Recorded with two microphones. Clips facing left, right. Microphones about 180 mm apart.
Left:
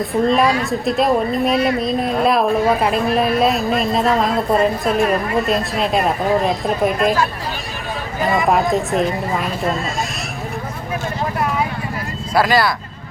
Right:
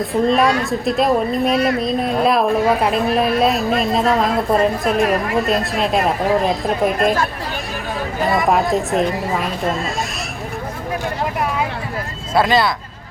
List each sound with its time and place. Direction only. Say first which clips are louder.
0.3 s a woman's voice: even; centre (ahead or behind)
7.0 s speech: left 1 dB; 50° right (ahead or behind)
8.2 s a woman's voice: even; centre (ahead or behind)
12.3 s speech: even; 25° right (ahead or behind)